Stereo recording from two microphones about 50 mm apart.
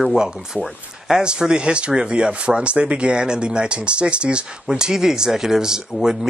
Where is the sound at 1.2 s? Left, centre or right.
Centre.